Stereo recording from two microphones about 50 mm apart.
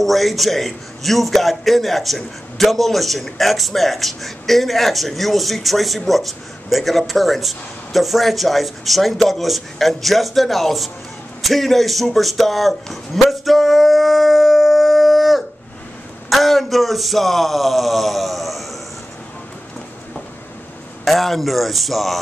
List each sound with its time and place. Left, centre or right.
0.0 s a man's voice: centre
11.4 s a sound: centre
16.3 s speech: centre
21.0 s a man's voice: centre